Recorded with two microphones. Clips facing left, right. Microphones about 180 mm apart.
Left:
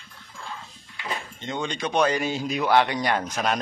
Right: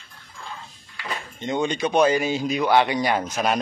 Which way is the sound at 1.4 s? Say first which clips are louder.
Right 6 dB; 10° right (ahead or behind).